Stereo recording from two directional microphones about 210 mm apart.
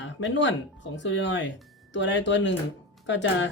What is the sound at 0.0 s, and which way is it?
Speech, 60° left (ahead or behind).